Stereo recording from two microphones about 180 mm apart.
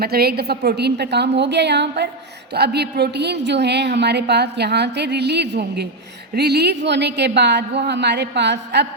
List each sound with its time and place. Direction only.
0.0 s a woman's voice: 60° right (ahead or behind)